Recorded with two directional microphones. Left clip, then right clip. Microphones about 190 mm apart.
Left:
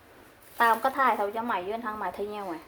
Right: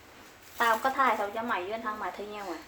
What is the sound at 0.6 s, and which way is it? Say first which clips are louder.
A woman's voice: left 2 dB; 50° left (ahead or behind).